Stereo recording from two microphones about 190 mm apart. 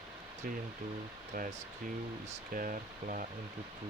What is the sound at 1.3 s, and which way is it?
Speech, 45° right (ahead or behind).